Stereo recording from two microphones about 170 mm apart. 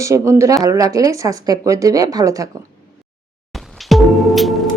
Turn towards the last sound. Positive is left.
turn(degrees=0)  # may be behind; listen again after turning